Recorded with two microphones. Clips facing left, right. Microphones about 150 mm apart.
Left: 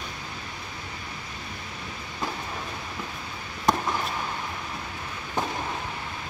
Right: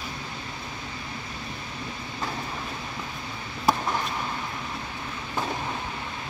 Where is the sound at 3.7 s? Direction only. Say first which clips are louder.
Even; 5° right (ahead or behind).